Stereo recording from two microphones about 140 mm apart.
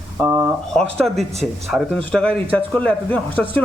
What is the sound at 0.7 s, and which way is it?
A man's voice, centre (ahead or behind).